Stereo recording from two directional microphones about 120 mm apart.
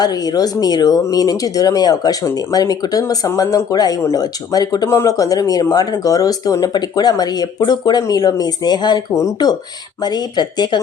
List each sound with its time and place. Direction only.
0.0 s speech: 35° left (ahead or behind)